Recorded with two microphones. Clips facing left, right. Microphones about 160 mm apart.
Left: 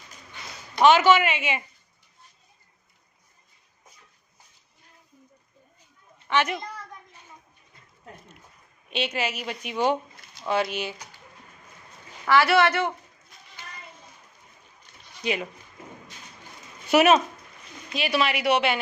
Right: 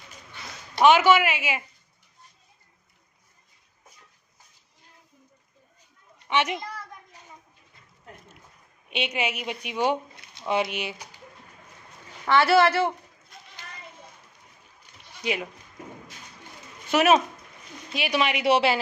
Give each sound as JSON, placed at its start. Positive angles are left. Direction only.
{"t": 0.8, "sound": "a woman's voice", "side_deg": -10}
{"t": 6.2, "sound": "a woman's voice", "side_deg": -20}
{"t": 8.9, "sound": "a woman's voice", "side_deg": -15}
{"t": 12.2, "sound": "a woman's voice", "side_deg": -25}
{"t": 15.2, "sound": "speech", "side_deg": -10}
{"t": 16.9, "sound": "speech", "side_deg": 5}
{"t": 17.9, "sound": "a woman's voice", "side_deg": -15}